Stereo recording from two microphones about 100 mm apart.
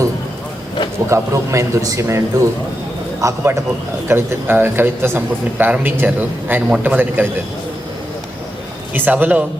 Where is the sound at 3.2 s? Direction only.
25° right (ahead or behind).